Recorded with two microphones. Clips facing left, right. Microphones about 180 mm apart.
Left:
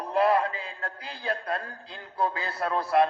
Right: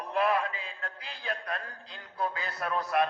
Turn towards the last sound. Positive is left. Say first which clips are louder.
# left 5 dB
turn(degrees=30)  # may be behind; listen again after turning